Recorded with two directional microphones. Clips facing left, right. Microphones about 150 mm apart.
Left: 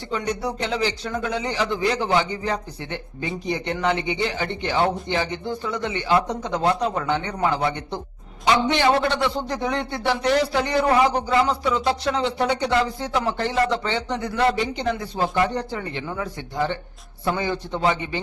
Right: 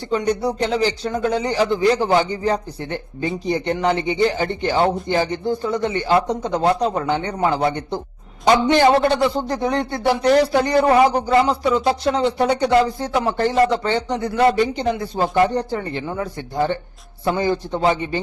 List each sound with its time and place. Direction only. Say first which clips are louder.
0.1 s a man's voice: right 6 dB; 35° right (ahead or behind)